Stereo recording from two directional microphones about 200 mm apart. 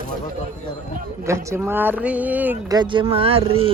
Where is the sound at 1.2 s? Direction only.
15° right (ahead or behind).